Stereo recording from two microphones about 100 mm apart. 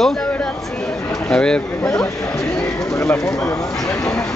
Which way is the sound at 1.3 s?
10° left (ahead or behind).